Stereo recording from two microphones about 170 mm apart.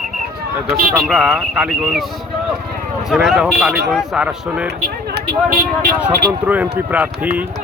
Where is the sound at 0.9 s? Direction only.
5° right (ahead or behind).